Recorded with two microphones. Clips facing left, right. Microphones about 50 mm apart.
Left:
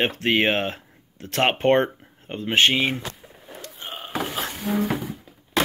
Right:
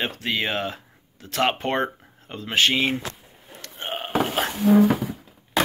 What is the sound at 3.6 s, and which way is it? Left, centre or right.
Burping, right.